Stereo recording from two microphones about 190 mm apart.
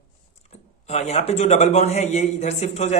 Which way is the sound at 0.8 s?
35° left (ahead or behind).